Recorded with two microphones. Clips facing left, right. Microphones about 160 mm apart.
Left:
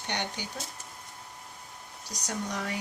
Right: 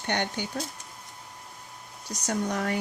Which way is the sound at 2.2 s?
55° right (ahead or behind).